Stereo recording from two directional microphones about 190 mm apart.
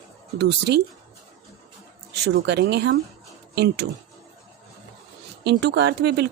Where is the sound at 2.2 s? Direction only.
60° right (ahead or behind).